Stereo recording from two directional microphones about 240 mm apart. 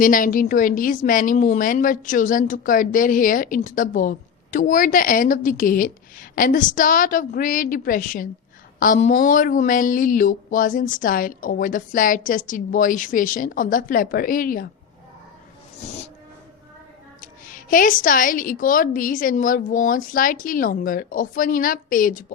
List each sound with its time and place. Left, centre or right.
0.0 s speech: left
17.2 s speech: left